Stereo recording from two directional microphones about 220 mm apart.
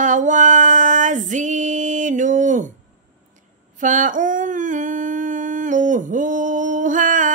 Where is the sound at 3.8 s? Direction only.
35° right (ahead or behind).